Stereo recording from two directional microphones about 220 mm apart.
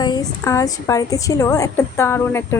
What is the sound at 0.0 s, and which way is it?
A woman's voice, 20° left (ahead or behind).